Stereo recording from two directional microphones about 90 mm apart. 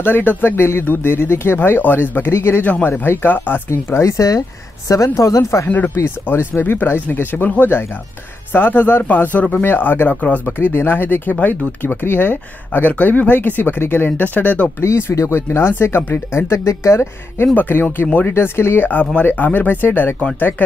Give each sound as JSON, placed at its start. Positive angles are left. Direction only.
{"t": 0.0, "sound": "speech", "side_deg": 20}
{"t": 3.7, "sound": "speech", "side_deg": 35}
{"t": 14.8, "sound": "speech", "side_deg": 30}